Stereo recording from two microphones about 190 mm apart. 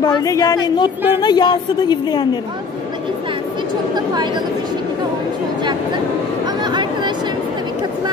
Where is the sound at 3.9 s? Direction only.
20° right (ahead or behind).